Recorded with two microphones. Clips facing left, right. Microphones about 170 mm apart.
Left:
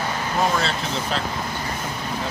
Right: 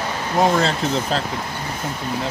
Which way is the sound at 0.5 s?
40° right (ahead or behind).